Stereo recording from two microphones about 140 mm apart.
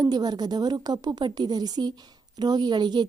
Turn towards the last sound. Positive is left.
turn(degrees=-30)  # may be behind; listen again after turning